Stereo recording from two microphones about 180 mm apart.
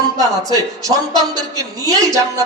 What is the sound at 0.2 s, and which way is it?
A woman's voice, 20° right (ahead or behind).